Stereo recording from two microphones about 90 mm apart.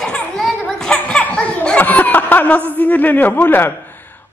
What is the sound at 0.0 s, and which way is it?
Children playing, 15° left (ahead or behind).